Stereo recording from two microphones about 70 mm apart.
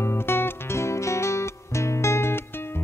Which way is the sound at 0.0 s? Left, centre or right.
Left.